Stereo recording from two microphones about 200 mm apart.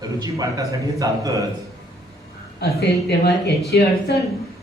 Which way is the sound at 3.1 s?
55° left (ahead or behind).